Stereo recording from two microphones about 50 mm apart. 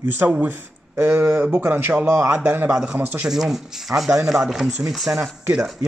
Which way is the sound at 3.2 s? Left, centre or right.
Centre.